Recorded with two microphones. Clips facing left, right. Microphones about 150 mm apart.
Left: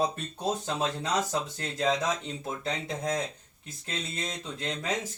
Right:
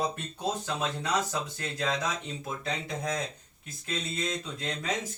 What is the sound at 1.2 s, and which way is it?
Speech, 25° left (ahead or behind).